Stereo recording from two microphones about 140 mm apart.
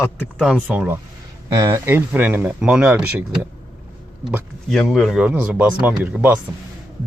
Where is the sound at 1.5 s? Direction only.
25° right (ahead or behind).